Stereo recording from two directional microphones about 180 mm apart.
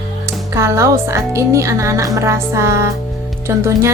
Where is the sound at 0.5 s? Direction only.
15° right (ahead or behind).